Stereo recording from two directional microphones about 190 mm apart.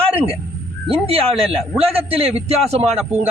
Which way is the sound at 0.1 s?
30° right (ahead or behind).